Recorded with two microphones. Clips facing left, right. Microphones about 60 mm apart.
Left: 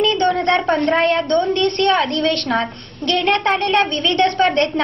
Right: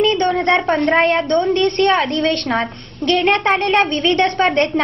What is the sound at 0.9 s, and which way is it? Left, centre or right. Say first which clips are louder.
Speech: right 3 dB; centre.